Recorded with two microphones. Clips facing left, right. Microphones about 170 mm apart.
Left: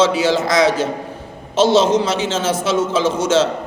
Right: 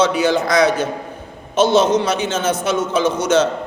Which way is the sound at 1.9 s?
25° left (ahead or behind).